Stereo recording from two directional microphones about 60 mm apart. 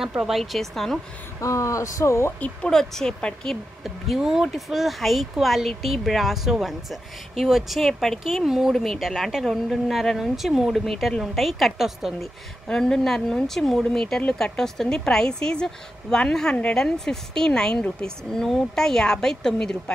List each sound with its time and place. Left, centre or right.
0.2 s speech: centre
1.4 s speech: left
2.7 s speech: centre
3.8 s speech: centre
8.7 s speech: centre
9.0 s speech: centre
12.6 s speech: centre